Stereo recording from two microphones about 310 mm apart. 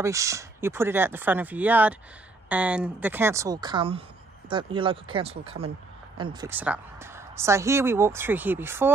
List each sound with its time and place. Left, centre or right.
0.0 s a woman's voice: centre